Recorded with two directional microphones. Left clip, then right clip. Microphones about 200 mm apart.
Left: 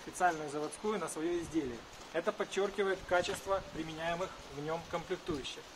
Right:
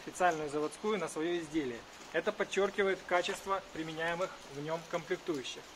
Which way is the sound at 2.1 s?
40° right (ahead or behind).